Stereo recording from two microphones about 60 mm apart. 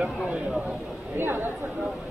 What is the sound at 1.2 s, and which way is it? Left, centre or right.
Speech, right.